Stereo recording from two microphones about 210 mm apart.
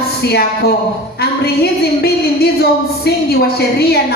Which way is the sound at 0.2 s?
50° left (ahead or behind).